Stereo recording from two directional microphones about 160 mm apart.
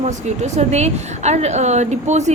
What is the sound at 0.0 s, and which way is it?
A woman's voice, 45° right (ahead or behind).